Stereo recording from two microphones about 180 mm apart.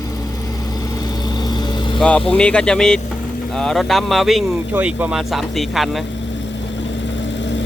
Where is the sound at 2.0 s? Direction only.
5° left (ahead or behind).